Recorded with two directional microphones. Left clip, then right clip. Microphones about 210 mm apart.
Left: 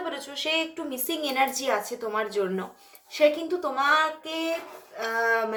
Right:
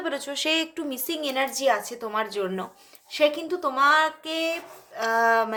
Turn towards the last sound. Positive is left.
turn(degrees=-35)  # may be behind; listen again after turning